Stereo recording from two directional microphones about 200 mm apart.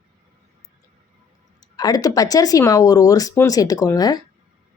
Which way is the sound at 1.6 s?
20° left (ahead or behind).